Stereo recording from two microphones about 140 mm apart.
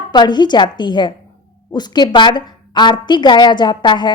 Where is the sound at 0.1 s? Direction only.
30° left (ahead or behind).